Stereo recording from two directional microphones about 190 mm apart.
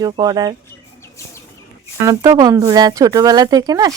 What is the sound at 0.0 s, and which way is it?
Speech, 20° right (ahead or behind).